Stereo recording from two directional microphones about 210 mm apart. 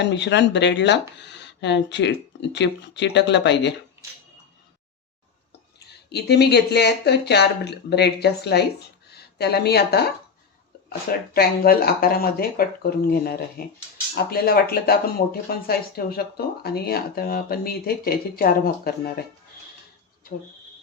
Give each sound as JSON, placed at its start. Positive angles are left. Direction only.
{"t": 0.0, "sound": "speech", "side_deg": 55}
{"t": 6.1, "sound": "speech", "side_deg": 50}